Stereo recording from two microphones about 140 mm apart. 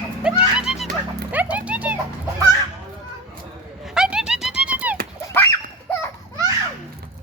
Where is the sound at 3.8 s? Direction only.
5° right (ahead or behind).